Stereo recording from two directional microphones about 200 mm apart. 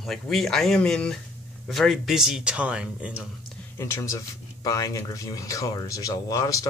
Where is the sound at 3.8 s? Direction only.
15° left (ahead or behind).